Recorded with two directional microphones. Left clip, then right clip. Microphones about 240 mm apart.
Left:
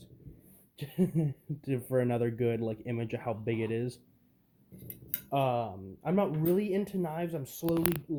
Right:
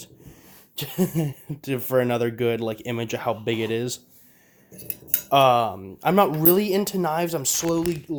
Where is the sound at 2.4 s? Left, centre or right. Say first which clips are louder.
Right 8 dB; right.